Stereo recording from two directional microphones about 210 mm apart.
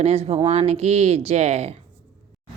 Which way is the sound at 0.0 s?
30° right (ahead or behind).